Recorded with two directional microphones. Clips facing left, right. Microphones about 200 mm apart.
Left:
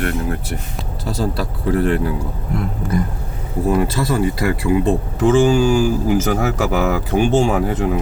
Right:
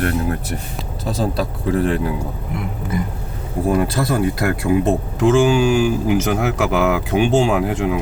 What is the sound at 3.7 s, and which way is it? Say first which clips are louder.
Speech: even; 55° right (ahead or behind).